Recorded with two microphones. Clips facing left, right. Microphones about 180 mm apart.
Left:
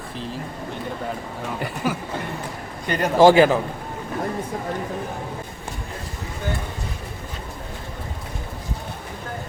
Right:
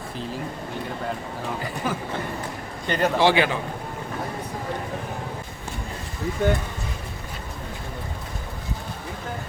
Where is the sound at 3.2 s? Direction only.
45° left (ahead or behind).